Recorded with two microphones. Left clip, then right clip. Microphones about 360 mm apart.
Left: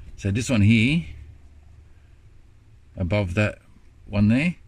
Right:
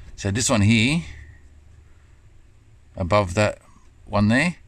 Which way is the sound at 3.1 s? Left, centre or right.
Centre.